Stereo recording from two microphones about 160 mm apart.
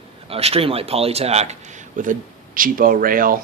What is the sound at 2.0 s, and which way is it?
Speech, 55° right (ahead or behind).